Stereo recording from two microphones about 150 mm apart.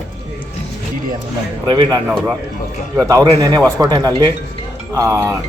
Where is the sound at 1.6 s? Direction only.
30° right (ahead or behind).